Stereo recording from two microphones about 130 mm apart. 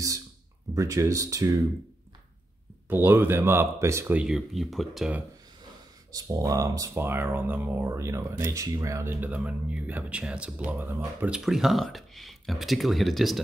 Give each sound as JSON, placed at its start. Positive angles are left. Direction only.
{"t": 0.7, "sound": "speech", "side_deg": -25}
{"t": 2.9, "sound": "speech", "side_deg": -15}
{"t": 4.2, "sound": "speech", "side_deg": 0}
{"t": 6.1, "sound": "speech", "side_deg": -30}